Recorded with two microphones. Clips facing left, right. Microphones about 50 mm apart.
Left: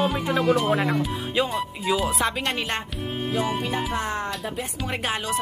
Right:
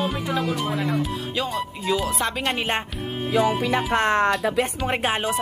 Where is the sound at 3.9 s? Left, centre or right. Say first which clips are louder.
Right 8 dB; right.